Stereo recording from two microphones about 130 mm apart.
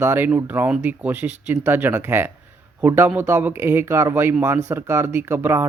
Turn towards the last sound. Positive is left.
turn(degrees=-20)  # may be behind; listen again after turning